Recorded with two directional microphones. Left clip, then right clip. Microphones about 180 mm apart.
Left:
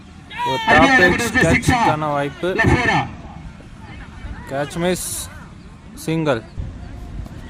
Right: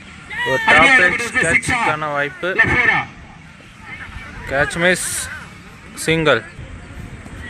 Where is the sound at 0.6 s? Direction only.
35° left (ahead or behind).